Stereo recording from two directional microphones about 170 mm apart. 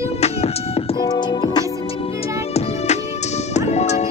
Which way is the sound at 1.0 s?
25° left (ahead or behind).